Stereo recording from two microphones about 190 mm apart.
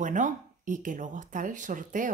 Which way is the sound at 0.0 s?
40° right (ahead or behind).